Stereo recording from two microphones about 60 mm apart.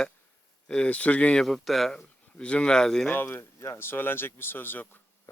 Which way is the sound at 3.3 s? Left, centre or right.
Left.